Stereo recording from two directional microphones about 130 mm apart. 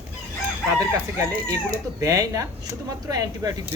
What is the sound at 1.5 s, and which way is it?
Speech, 25° right (ahead or behind).